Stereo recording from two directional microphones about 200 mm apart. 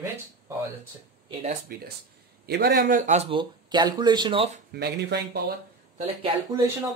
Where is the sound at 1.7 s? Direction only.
50° right (ahead or behind).